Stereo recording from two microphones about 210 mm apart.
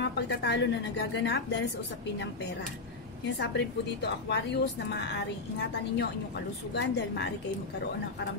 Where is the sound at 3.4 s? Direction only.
55° left (ahead or behind).